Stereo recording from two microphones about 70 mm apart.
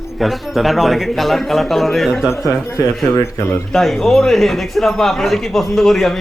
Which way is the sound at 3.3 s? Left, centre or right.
Left.